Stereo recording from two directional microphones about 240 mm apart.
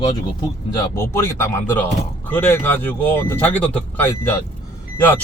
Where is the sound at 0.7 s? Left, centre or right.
Centre.